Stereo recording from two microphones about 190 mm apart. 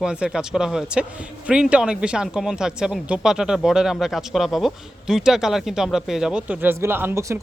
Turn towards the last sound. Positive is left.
turn(degrees=-10)  # may be behind; listen again after turning